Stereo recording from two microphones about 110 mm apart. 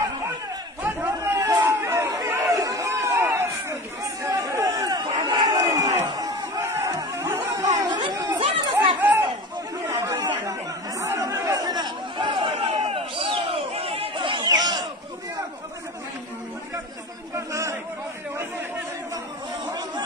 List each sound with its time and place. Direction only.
0.8 s a sound: 20° right (ahead or behind)
4.2 s crowd: 30° right (ahead or behind)
6.6 s chatter: 25° right (ahead or behind); by 8.5 s 40° right (ahead or behind)
9.0 s a sound: 15° right (ahead or behind)
9.8 s chatter: 30° right (ahead or behind)
17.5 s chatter: 30° right (ahead or behind)